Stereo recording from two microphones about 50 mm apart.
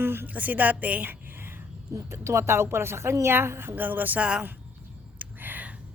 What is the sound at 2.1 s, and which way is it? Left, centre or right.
A woman's voice, right.